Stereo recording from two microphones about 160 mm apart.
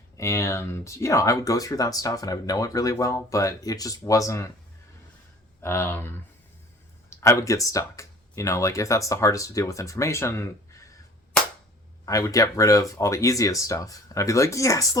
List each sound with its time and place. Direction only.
0.2 s speech: 20° left (ahead or behind)
5.6 s speech: 15° left (ahead or behind)
11.3 s cap gun: 5° left (ahead or behind)
12.0 s speech: 20° left (ahead or behind)